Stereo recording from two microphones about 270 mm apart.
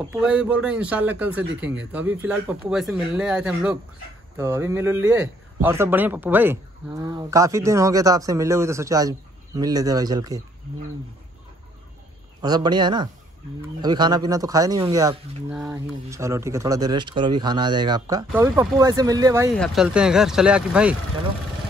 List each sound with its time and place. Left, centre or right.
0.1 s a man's voice: centre
12.4 s a man's voice: centre
19.5 s speech: centre